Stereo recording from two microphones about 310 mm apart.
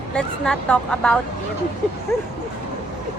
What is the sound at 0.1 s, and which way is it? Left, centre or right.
A woman's voice, centre.